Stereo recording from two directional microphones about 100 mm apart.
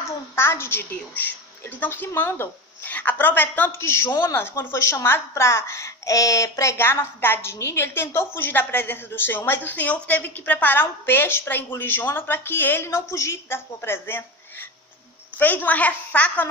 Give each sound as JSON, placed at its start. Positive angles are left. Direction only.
{"t": 0.4, "sound": "a woman's voice", "side_deg": 25}